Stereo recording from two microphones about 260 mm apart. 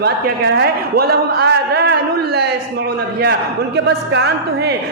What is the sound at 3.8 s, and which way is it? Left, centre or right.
Speech, right.